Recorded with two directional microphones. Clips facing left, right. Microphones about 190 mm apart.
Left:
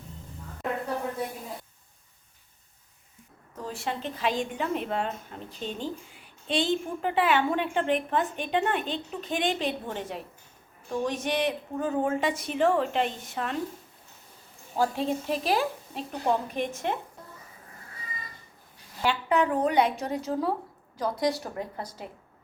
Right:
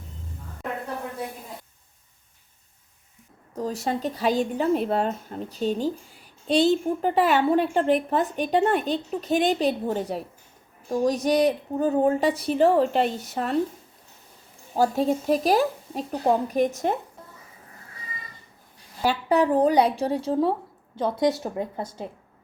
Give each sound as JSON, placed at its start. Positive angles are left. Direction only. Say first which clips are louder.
{"t": 3.5, "sound": "speech", "louder": "right 6 dB", "side_deg": -40}
{"t": 14.8, "sound": "speech", "louder": "right 5 dB", "side_deg": -40}
{"t": 19.0, "sound": "a woman's voice", "louder": "right 4 dB", "side_deg": -35}